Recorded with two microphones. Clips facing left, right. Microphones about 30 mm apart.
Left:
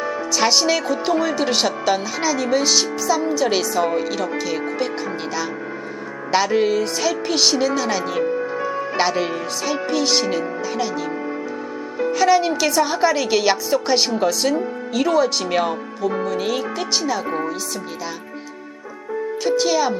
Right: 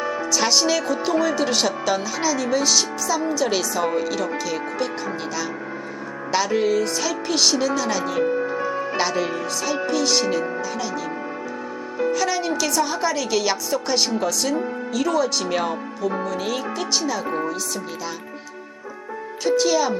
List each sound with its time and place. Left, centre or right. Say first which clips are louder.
0.0 s speech: left 2 dB; centre
6.3 s speech: left 2 dB; centre
8.2 s music: even; centre
9.0 s speech: left 4 dB; centre
11.9 s music: even; centre
12.2 s a woman's voice: left 6 dB; centre
19.5 s speech: even; centre